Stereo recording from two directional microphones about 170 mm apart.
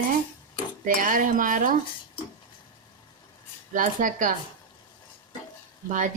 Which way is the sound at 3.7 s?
50° right (ahead or behind).